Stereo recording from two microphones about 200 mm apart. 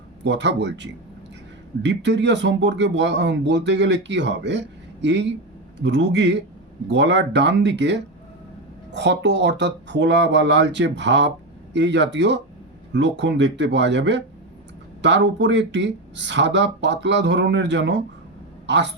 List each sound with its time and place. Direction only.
0.3 s speech: 60° right (ahead or behind)